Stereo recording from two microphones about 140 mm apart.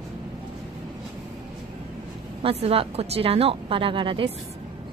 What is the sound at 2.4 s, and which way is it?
A woman's voice, 45° right (ahead or behind).